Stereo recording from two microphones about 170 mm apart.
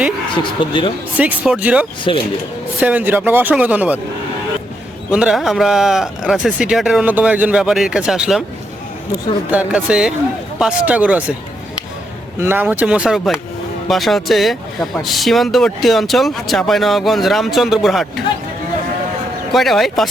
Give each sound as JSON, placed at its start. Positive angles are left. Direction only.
{"t": 0.6, "sound": "speech", "side_deg": 30}
{"t": 1.1, "sound": "speech", "side_deg": -10}
{"t": 5.1, "sound": "speech", "side_deg": -5}
{"t": 9.5, "sound": "speech", "side_deg": -5}
{"t": 12.4, "sound": "speech", "side_deg": -10}
{"t": 19.5, "sound": "speech", "side_deg": 0}